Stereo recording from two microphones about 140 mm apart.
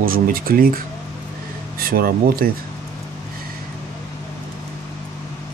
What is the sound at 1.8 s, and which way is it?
Speech, 90° right.